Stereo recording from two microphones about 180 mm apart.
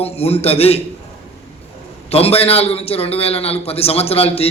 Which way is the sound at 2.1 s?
35° left (ahead or behind).